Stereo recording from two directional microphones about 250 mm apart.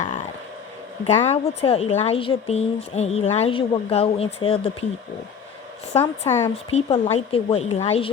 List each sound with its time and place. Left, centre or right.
1.0 s speech: left
6.0 s speech: centre
6.5 s speech: left